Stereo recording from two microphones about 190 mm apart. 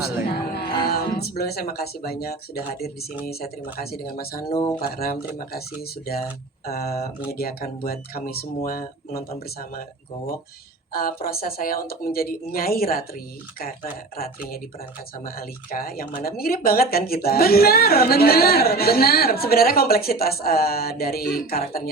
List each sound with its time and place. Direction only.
0.3 s music: 55° left (ahead or behind)
0.9 s speech: 55° left (ahead or behind)
10.9 s speech: 50° left (ahead or behind)